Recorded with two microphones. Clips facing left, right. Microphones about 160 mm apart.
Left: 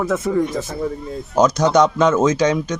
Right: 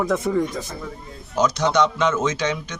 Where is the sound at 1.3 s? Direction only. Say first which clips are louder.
Left 5 dB; 45° left (ahead or behind).